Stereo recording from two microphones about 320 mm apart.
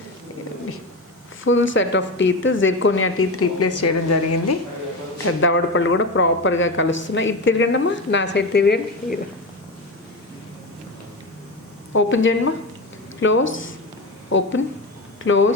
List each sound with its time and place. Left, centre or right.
1.5 s a man's voice: left
5.2 s a man's voice: left
11.9 s a man's voice: left
15.2 s a man's voice: left